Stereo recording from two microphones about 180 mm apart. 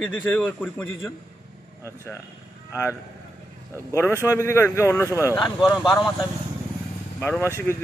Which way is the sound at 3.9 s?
15° left (ahead or behind).